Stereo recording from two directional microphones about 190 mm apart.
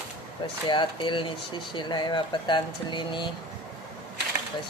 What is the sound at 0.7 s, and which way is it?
Speech, 25° left (ahead or behind).